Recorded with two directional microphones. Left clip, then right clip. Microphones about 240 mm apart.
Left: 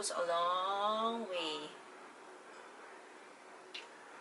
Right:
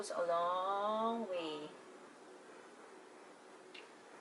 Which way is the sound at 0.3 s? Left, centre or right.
Centre.